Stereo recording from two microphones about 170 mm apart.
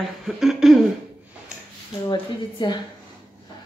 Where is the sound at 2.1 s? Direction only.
25° left (ahead or behind).